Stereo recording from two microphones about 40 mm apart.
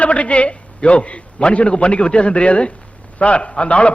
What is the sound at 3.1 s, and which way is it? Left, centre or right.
Speech, left.